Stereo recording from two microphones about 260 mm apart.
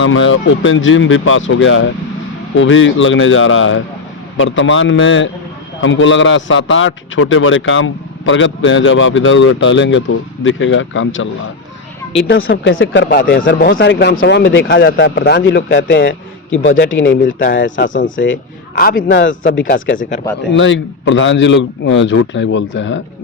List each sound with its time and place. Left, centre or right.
0.0 s a man's voice: left
12.3 s a man's voice: left